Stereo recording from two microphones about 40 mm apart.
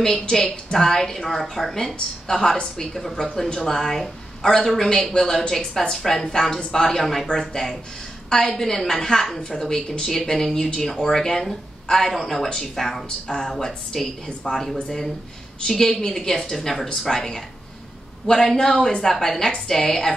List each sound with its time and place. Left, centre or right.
0.0 s a woman's voice: centre